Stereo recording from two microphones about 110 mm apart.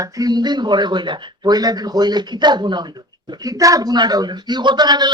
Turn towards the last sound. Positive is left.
turn(degrees=-40)  # may be behind; listen again after turning